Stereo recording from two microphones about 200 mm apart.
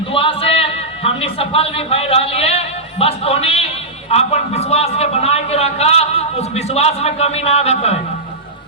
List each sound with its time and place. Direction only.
0.1 s a man's voice: 25° left (ahead or behind)